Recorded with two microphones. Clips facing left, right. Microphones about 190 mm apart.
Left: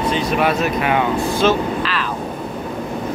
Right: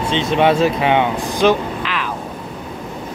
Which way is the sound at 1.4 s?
15° right (ahead or behind).